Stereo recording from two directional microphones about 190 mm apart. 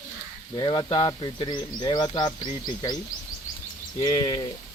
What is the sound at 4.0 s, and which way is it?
Speech, 20° left (ahead or behind).